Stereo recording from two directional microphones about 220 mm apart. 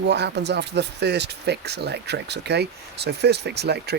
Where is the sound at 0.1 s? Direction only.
50° right (ahead or behind).